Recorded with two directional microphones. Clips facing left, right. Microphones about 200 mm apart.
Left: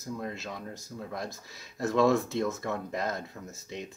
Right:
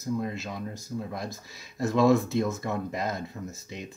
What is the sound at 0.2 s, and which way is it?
Speech, 10° right (ahead or behind).